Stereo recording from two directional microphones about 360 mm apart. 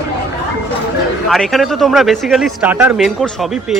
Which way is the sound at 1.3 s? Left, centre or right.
Centre.